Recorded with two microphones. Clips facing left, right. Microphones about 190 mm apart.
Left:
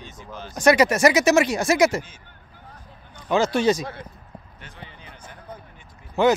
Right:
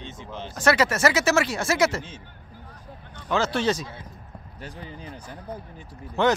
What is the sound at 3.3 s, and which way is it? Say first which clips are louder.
Speech: left 4 dB; 15° left (ahead or behind).